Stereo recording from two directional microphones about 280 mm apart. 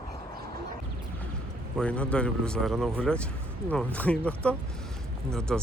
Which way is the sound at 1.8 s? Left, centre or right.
Centre.